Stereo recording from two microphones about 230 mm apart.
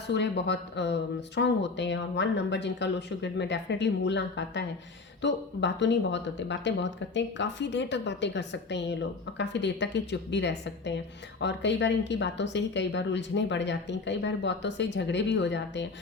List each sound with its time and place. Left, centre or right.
0.1 s speech: left